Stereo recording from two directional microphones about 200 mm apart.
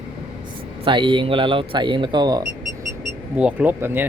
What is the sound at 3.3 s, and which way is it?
Speech, 5° right (ahead or behind).